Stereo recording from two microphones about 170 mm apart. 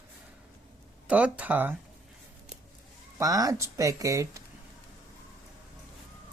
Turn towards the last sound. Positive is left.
turn(degrees=-20)  # may be behind; listen again after turning